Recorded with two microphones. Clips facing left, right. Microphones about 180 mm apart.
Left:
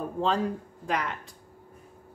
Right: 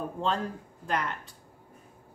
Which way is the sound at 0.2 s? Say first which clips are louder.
Left 5 dB; centre (ahead or behind).